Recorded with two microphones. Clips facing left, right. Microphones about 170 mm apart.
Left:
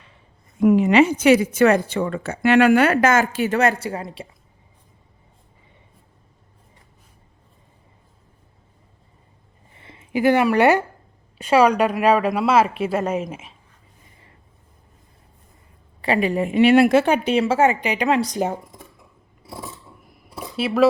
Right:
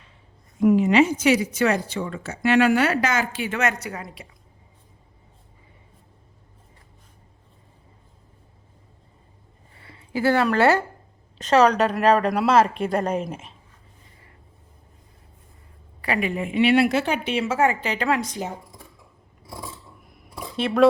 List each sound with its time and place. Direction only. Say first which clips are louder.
0.6 s a woman's voice: left 2 dB; 65° left (ahead or behind); by 4.3 s 30° left (ahead or behind)
9.7 s speech: left 4 dB; 20° left (ahead or behind)
16.0 s speech: left 5 dB; 30° left (ahead or behind)
17.6 s speech: left 3 dB; 20° left (ahead or behind)
18.4 s speech: left 8 dB; 55° left (ahead or behind)
20.1 s a sound: even; centre (ahead or behind)
20.6 s speech: left 1 dB; 5° left (ahead or behind)